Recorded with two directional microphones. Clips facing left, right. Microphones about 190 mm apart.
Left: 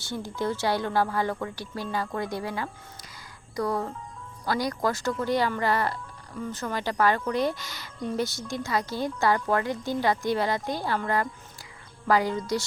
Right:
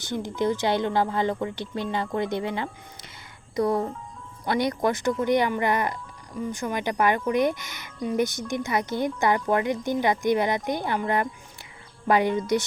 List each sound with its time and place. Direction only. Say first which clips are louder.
0.0 s speech: right 4 dB; 20° right (ahead or behind)